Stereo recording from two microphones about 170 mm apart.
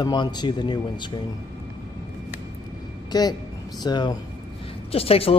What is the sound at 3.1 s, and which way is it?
A woman's voice, 25° left (ahead or behind).